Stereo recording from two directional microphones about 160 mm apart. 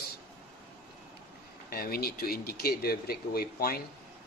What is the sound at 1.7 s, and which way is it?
Speech, 70° left (ahead or behind).